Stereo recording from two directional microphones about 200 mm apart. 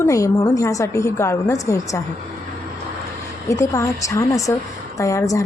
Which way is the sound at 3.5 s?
15° left (ahead or behind).